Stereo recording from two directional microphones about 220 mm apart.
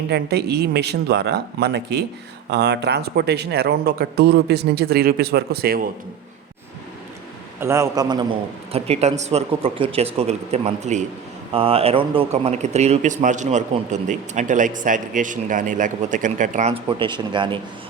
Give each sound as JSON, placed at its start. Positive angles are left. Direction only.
{"t": 0.1, "sound": "speech", "side_deg": -45}
{"t": 7.6, "sound": "a man's voice", "side_deg": -10}